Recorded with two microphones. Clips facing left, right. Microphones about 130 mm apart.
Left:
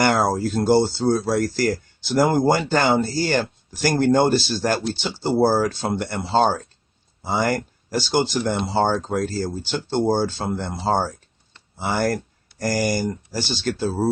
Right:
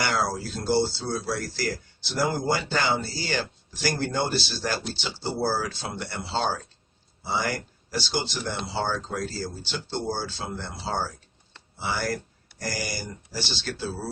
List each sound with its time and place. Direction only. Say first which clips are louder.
0.0 s speech: left 8 dB; 50° left (ahead or behind)